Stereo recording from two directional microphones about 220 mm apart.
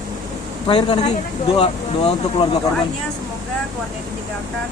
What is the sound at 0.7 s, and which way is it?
Speech, 30° left (ahead or behind).